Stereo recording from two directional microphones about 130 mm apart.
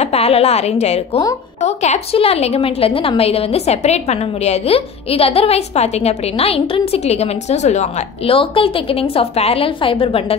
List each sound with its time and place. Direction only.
0.0 s a woman's voice: 50° left (ahead or behind)
2.1 s a woman's voice: 50° left (ahead or behind)